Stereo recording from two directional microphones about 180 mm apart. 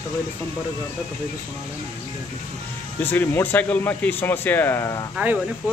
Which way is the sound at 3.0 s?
10° left (ahead or behind).